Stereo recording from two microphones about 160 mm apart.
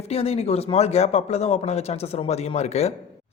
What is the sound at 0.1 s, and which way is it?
Speech, 40° left (ahead or behind).